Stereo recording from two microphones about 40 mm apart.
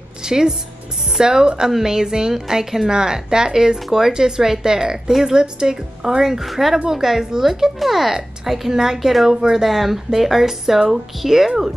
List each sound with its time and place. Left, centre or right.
0.2 s a woman's voice: centre